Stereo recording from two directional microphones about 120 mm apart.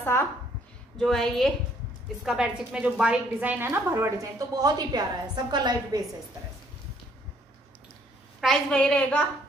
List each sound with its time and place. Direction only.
0.1 s a woman's voice: 20° left (ahead or behind)
0.9 s a woman's voice: 5° left (ahead or behind); by 6.0 s 35° right (ahead or behind)
8.4 s a woman's voice: 5° left (ahead or behind)